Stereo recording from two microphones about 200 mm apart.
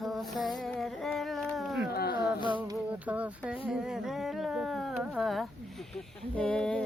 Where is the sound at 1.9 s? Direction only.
50° left (ahead or behind).